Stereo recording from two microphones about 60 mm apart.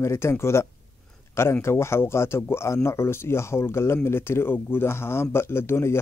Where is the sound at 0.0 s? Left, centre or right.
Left.